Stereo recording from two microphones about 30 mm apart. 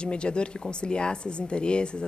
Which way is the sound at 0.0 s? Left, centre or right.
Left.